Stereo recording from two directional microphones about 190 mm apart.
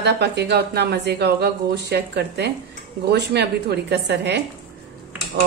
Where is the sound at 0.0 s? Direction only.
60° right (ahead or behind).